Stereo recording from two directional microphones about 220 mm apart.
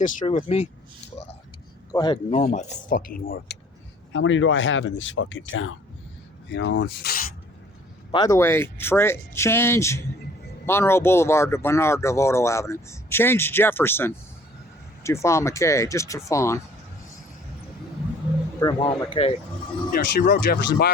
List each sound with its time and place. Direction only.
0.0 s speech: 35° left (ahead or behind)
1.9 s speech: 20° left (ahead or behind); by 3.6 s 40° left (ahead or behind)
4.1 s speech: 60° left (ahead or behind)
6.5 s rub: 50° left (ahead or behind)
8.1 s speech: 15° left (ahead or behind)
18.6 s speech: 20° left (ahead or behind)
19.9 s speech: 40° left (ahead or behind)